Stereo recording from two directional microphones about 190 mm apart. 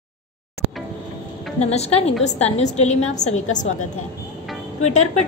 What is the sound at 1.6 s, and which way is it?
A woman's voice, 35° left (ahead or behind).